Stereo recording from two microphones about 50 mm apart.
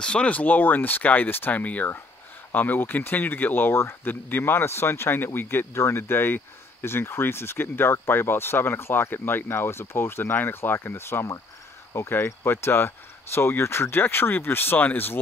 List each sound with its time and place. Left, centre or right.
0.0 s speech: left
5.8 s speech: left